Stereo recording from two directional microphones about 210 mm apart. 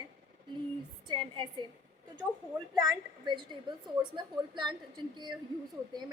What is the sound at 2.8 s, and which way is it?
A woman's voice, 20° right (ahead or behind).